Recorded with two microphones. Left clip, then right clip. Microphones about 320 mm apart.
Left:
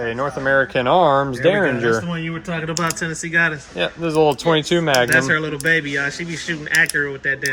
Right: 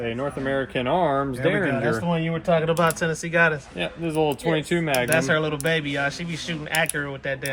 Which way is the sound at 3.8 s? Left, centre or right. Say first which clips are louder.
Left 8 dB; centre.